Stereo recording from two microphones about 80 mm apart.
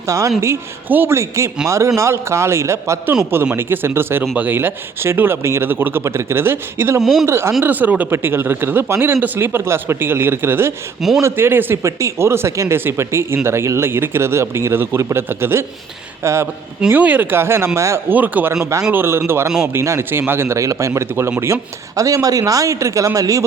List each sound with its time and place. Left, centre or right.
0.1 s speech: right
7.0 s speech: centre
7.3 s speech: right
7.6 s speech: right
16.9 s speech: right
18.1 s speech: right
18.6 s speech: right
18.9 s speech: right